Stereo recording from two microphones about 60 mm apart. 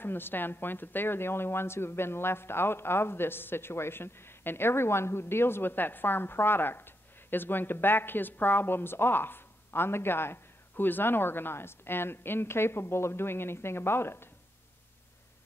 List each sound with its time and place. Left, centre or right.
0.0 s speech: left